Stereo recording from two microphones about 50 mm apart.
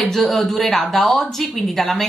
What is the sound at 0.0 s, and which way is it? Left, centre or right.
A woman's voice, centre.